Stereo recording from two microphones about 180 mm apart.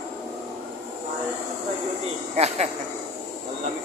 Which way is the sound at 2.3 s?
35° right (ahead or behind).